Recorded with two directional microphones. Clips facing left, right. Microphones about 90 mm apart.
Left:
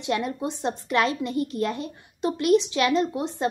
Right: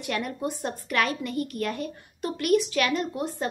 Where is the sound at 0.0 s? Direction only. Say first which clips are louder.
Left 3 dB; 25° left (ahead or behind).